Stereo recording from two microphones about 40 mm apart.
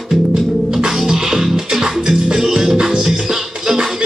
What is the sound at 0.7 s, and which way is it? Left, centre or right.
Music, centre.